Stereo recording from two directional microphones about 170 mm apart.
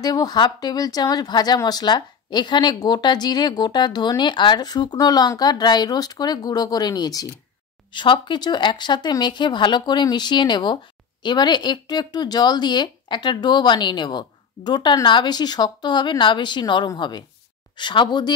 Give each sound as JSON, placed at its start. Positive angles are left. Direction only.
{"t": 0.0, "sound": "speech", "side_deg": 20}